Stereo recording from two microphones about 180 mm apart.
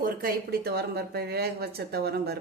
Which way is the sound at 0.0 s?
55° right (ahead or behind).